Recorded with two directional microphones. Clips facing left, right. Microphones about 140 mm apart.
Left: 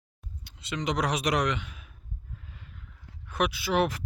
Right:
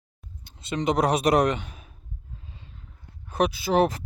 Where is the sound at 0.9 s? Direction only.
50° right (ahead or behind).